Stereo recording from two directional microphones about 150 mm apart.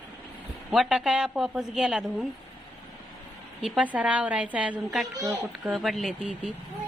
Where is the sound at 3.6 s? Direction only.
10° right (ahead or behind).